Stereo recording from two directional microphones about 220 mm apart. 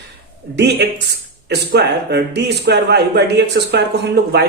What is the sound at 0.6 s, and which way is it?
A man's voice, 50° right (ahead or behind).